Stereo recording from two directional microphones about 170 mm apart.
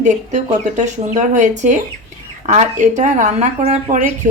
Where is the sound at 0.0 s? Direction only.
45° right (ahead or behind).